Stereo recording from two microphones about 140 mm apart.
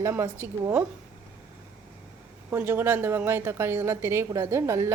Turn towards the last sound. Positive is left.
turn(degrees=-20)  # may be behind; listen again after turning